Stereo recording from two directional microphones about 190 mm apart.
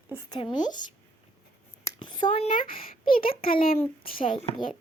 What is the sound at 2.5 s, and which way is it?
Speech, 50° left (ahead or behind).